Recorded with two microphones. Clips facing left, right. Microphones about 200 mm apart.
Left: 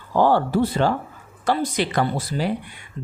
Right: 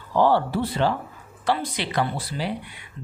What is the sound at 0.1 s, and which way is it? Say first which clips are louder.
Speech: left 2 dB; 45° left (ahead or behind).